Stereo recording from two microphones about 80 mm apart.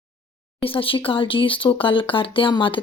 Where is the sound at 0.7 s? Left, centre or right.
Left.